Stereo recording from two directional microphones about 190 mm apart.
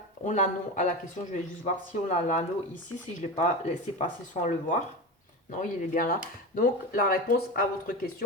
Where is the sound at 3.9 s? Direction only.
40° left (ahead or behind).